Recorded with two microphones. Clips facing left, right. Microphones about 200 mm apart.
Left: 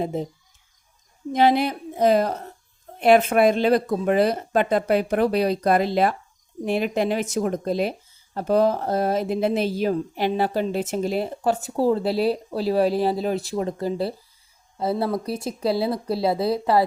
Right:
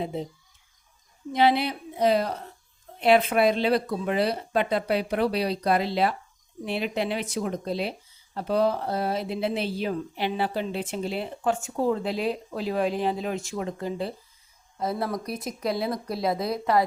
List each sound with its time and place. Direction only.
0.0 s speech: 45° left (ahead or behind)
1.3 s speech: 45° left (ahead or behind); by 16.8 s 30° left (ahead or behind)